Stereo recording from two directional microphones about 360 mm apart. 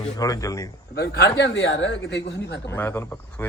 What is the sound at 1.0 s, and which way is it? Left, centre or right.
Speech, left.